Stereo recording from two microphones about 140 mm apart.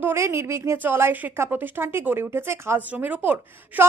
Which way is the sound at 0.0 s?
15° right (ahead or behind).